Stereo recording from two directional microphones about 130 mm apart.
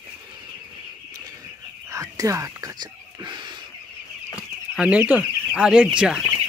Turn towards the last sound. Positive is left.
turn(degrees=-5)  # may be behind; listen again after turning